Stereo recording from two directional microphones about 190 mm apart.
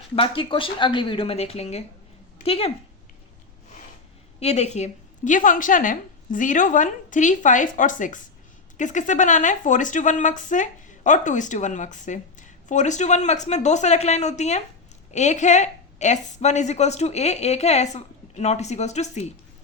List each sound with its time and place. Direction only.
0.2 s speech: 30° left (ahead or behind)
4.4 s a woman's voice: 35° left (ahead or behind)